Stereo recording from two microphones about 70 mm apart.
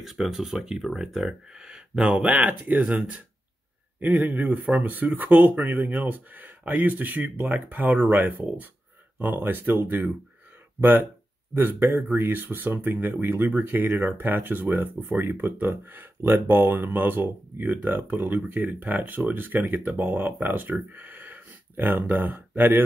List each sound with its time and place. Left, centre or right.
0.0 s speech: centre; by 11.1 s right
12.1 s speech: right